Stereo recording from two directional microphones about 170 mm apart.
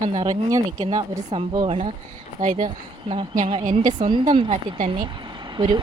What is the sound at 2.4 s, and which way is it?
Speech, 45° right (ahead or behind).